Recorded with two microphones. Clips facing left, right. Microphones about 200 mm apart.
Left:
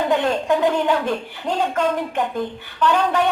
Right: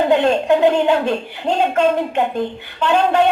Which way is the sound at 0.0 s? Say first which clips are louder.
Right 5 dB; 25° right (ahead or behind).